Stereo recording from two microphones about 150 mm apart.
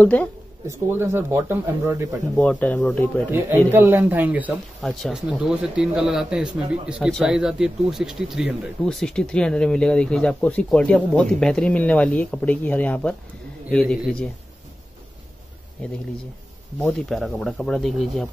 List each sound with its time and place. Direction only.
0.0 s speech: 10° left (ahead or behind)
0.7 s speech: 15° right (ahead or behind)
2.3 s speech: 10° left (ahead or behind)
3.3 s speech: 15° right (ahead or behind); by 14.3 s 5° left (ahead or behind)
16.8 s speech: centre (ahead or behind)